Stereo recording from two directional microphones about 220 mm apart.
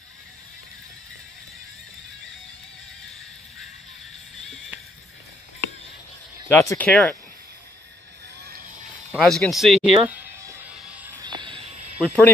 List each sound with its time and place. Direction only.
6.5 s speech: 10° left (ahead or behind)
9.1 s speech: centre (ahead or behind)
10.0 s music: 10° right (ahead or behind)
11.2 s a sound: 20° right (ahead or behind)